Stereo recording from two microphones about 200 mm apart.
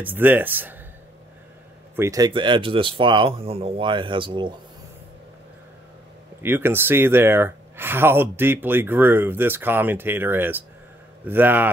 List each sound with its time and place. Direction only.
0.0 s speech: 10° right (ahead or behind)
2.0 s speech: 15° right (ahead or behind)
6.4 s speech: 10° right (ahead or behind)